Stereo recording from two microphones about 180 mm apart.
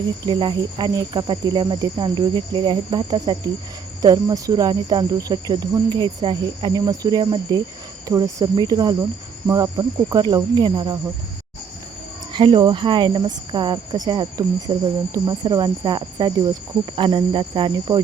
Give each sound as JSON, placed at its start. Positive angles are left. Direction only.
{"t": 0.3, "sound": "speech", "side_deg": -25}
{"t": 12.3, "sound": "speech", "side_deg": -25}